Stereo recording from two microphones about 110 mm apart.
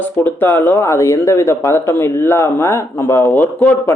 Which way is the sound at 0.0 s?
15° left (ahead or behind).